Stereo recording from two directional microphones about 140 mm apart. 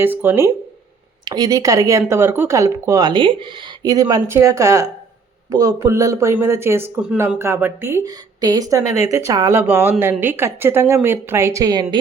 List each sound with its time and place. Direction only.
0.0 s a woman's voice: 15° right (ahead or behind)
1.2 s a woman's voice: 30° right (ahead or behind)